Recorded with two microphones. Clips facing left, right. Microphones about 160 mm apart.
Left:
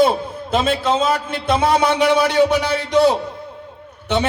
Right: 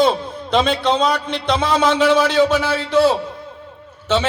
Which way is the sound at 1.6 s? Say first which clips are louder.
Left 1 dB; 55° left (ahead or behind).